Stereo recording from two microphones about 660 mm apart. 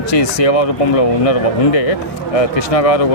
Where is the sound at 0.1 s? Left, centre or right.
Left.